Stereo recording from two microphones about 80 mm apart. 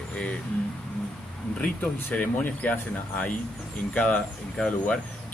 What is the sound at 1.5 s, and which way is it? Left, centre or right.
Speech, centre.